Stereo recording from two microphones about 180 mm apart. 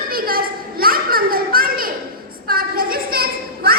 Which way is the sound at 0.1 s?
55° right (ahead or behind).